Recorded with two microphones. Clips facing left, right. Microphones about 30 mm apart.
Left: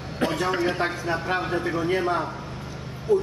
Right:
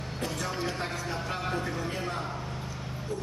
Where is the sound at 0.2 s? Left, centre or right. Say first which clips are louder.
Left 10 dB; left.